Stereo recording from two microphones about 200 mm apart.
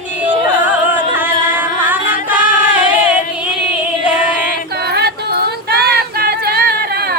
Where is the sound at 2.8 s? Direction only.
5° right (ahead or behind).